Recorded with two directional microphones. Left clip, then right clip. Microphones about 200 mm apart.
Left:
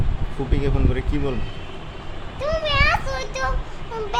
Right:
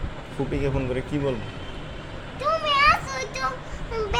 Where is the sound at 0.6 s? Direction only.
Centre (ahead or behind).